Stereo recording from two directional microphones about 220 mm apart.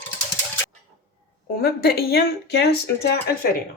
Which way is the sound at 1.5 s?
45° left (ahead or behind).